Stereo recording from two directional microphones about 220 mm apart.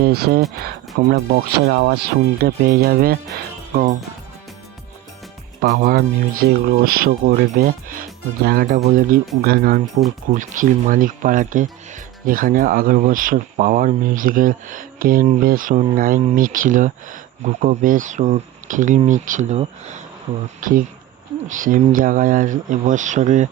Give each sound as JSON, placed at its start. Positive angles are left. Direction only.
{"t": 0.0, "sound": "speech", "side_deg": -45}
{"t": 5.6, "sound": "speech", "side_deg": -40}